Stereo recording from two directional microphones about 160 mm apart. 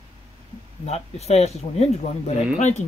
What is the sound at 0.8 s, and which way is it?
Speech, 40° left (ahead or behind).